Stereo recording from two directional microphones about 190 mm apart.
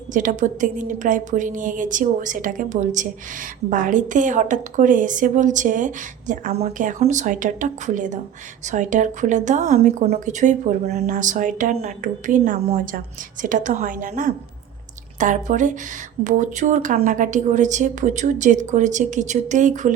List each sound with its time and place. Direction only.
0.1 s a woman's voice: 45° right (ahead or behind)